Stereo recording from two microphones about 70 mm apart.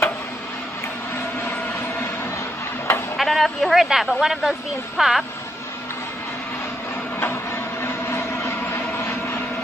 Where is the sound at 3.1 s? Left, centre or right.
Centre.